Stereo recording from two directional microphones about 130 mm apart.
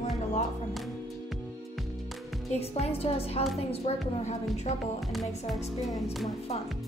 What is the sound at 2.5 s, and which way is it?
A woman's voice, 55° left (ahead or behind).